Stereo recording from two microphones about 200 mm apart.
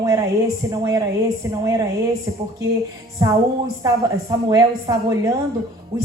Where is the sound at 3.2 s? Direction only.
15° right (ahead or behind).